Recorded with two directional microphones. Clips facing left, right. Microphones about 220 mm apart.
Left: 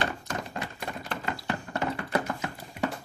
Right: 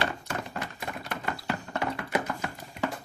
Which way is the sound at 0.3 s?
5° right (ahead or behind).